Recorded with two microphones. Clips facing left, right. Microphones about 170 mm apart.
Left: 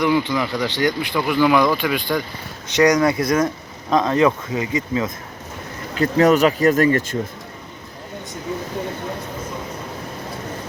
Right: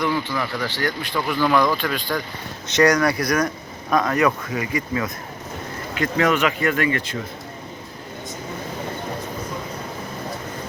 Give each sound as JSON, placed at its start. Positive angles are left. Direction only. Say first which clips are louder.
{"t": 0.0, "sound": "speech", "louder": "left 5 dB", "side_deg": 15}
{"t": 5.9, "sound": "speech", "louder": "left 5 dB", "side_deg": 35}